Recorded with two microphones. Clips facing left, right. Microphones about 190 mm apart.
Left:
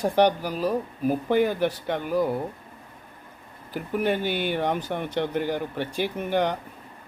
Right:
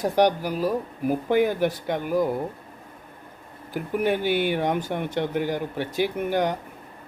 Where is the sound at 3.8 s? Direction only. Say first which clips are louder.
Right 1 dB; 10° right (ahead or behind).